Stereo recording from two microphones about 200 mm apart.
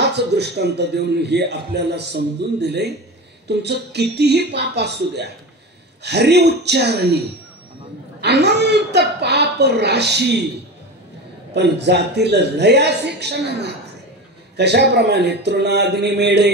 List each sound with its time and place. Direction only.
0.0 s a man's voice: 55° right (ahead or behind)
8.2 s a man's voice: 55° right (ahead or behind)
11.5 s a man's voice: 60° right (ahead or behind)